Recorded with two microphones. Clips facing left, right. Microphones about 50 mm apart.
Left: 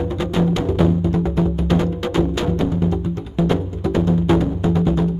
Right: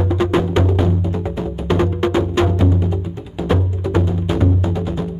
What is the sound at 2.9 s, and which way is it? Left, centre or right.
Music, centre.